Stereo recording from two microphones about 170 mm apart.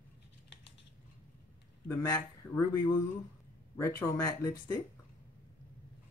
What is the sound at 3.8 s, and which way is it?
Speech, 15° left (ahead or behind).